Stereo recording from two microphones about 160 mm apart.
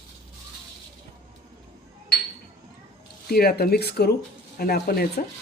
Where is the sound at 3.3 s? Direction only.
70° left (ahead or behind); by 4.2 s 90° left.